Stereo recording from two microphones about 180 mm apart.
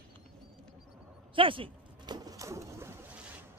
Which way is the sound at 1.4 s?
30° right (ahead or behind).